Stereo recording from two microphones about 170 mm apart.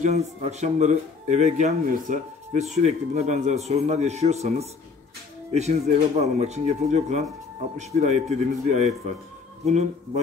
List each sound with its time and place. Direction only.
0.0 s speech: 40° right (ahead or behind)